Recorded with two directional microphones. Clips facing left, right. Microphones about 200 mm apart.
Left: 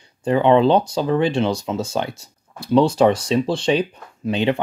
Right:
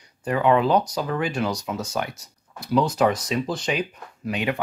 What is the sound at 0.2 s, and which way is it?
Speech, 25° left (ahead or behind).